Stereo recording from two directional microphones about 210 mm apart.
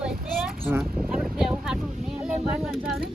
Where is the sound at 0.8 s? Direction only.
Centre (ahead or behind).